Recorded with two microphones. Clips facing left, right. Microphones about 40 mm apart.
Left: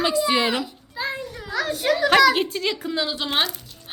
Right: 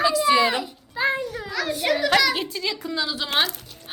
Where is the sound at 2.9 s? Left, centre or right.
Centre.